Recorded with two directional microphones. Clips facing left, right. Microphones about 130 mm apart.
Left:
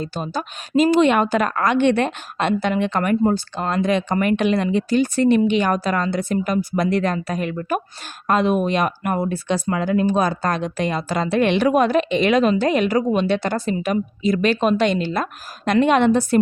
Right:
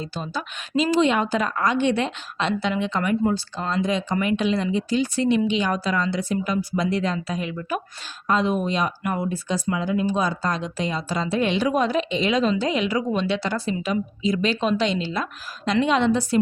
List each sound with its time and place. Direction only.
0.0 s a woman's voice: 50° left (ahead or behind)